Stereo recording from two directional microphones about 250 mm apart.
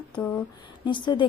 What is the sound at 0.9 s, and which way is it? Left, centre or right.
Speech, centre.